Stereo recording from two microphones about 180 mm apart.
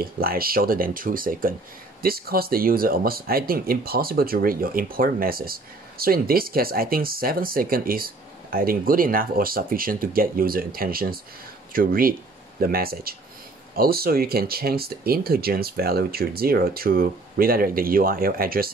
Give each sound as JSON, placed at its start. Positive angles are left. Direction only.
{"t": 0.0, "sound": "speech", "side_deg": -55}